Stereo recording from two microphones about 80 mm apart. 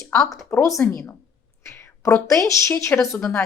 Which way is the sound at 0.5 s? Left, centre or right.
Left.